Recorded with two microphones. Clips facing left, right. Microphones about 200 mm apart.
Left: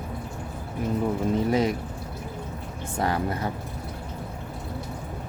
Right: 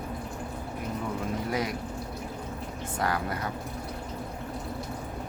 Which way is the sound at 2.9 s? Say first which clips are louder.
Left 4 dB; 25° left (ahead or behind).